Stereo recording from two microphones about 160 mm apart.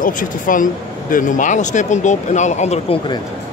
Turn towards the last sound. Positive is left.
turn(degrees=35)  # may be behind; listen again after turning